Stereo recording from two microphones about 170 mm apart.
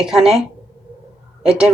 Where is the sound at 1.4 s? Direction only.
5° right (ahead or behind).